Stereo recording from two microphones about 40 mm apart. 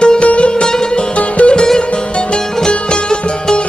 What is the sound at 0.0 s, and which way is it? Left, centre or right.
Music, left.